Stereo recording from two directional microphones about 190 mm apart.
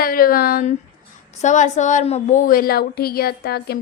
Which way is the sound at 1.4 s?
40° left (ahead or behind).